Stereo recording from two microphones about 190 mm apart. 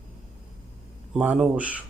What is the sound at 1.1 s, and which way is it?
Speech, 5° right (ahead or behind).